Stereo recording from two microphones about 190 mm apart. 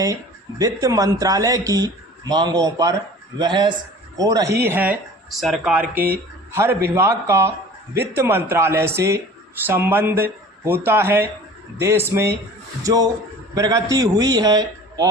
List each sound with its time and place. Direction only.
0.6 s speech: 20° right (ahead or behind); by 5.8 s centre (ahead or behind)
6.5 s a man's voice: 15° right (ahead or behind)